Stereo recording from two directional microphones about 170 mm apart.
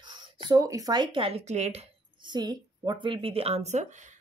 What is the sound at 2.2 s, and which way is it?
Speech, 25° right (ahead or behind).